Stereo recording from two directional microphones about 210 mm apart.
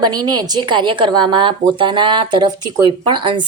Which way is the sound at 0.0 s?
20° right (ahead or behind).